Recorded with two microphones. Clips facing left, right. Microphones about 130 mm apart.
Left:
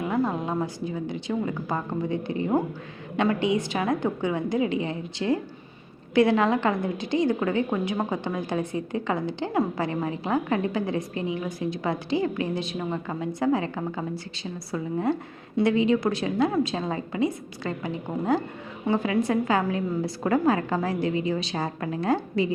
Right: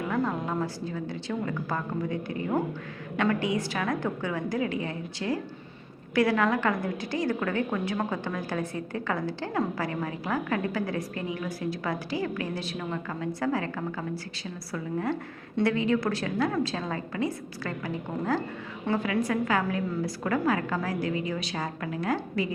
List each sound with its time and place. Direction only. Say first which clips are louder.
0.0 s a woman's voice: left 3 dB; 20° left (ahead or behind)